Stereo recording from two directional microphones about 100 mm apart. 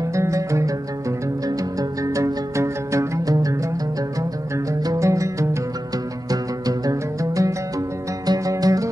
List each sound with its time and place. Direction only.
0.1 s music: 30° right (ahead or behind)
4.8 s music: 30° right (ahead or behind)